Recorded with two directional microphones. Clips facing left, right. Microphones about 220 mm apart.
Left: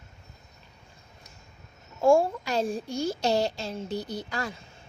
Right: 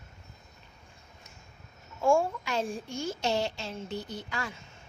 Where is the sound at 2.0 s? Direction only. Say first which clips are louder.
Left 4 dB; 35° left (ahead or behind).